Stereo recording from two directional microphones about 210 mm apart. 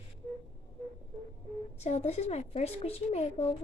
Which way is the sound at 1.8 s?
30° left (ahead or behind).